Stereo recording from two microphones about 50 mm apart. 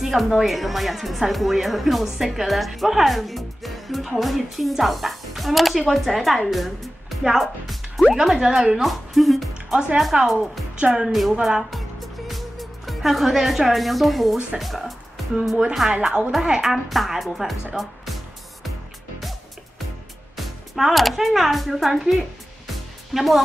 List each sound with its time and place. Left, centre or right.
0.0 s a woman's voice: centre
9.5 s speech: centre
11.1 s a woman's voice: centre
15.9 s speech: centre
16.7 s speech: centre
17.7 s music: centre
20.3 s speech: centre
23.1 s speech: centre